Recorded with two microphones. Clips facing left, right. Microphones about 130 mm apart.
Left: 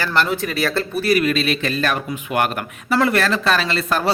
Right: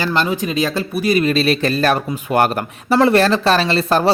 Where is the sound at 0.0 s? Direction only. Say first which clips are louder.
Right 2 dB; 15° right (ahead or behind).